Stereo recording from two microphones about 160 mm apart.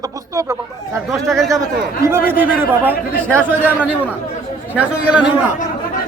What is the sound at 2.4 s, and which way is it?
Speech, 10° right (ahead or behind).